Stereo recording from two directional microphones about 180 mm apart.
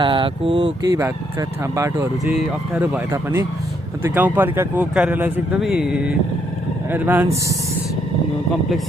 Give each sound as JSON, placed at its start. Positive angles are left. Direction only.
{"t": 0.0, "sound": "speech", "side_deg": -30}
{"t": 2.2, "sound": "speech", "side_deg": -5}